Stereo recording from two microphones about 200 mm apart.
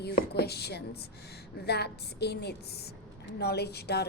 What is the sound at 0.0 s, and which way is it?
A woman's voice, 55° left (ahead or behind).